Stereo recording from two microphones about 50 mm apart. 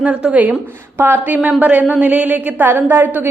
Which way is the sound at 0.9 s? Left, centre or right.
Right.